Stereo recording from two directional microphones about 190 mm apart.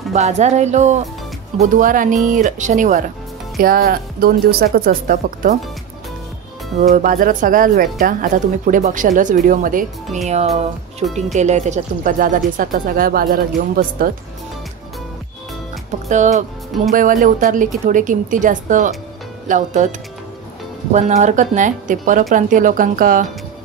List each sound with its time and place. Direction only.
0.1 s speech: 35° right (ahead or behind)
6.8 s speech: 45° right (ahead or behind)
10.2 s speech: 35° right (ahead or behind)
16.1 s speech: 40° right (ahead or behind)
20.9 s speech: 40° right (ahead or behind)